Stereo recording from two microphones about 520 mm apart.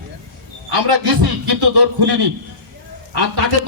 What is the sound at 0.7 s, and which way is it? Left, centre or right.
A man's voice, right.